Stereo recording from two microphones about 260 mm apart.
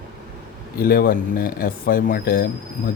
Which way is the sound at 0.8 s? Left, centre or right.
Left.